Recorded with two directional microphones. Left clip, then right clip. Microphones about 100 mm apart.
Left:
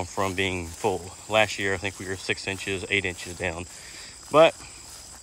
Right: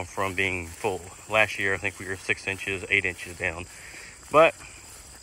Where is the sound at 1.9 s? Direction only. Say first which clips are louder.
Right 1 dB; 35° left (ahead or behind).